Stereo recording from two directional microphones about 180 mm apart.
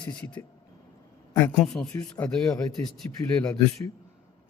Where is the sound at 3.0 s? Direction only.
15° left (ahead or behind).